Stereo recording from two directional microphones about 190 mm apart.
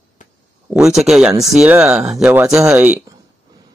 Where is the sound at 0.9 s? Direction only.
Centre (ahead or behind).